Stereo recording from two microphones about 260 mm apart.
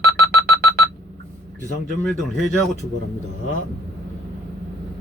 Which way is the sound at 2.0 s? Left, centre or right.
Centre.